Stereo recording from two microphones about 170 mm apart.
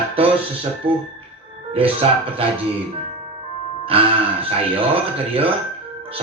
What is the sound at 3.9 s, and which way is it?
Speech, 35° right (ahead or behind).